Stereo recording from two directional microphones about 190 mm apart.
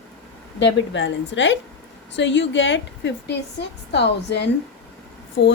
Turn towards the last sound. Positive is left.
turn(degrees=70)  # may be behind; listen again after turning